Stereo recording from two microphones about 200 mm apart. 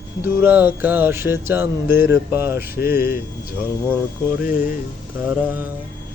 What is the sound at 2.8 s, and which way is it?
Speech, 50° left (ahead or behind).